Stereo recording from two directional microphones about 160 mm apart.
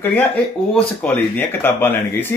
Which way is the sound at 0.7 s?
10° left (ahead or behind).